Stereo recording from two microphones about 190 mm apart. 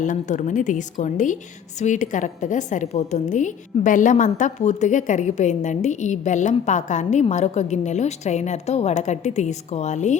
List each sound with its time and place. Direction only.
0.0 s a woman's voice: 40° left (ahead or behind)